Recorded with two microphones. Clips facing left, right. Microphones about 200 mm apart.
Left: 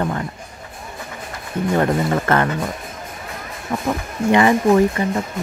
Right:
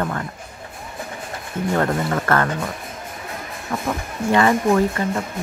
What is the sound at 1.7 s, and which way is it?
Speech, 15° left (ahead or behind).